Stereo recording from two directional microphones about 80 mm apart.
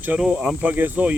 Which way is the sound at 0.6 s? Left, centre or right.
Right.